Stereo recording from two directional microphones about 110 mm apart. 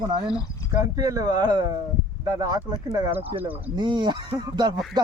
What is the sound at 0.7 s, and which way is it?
Speech, 30° right (ahead or behind).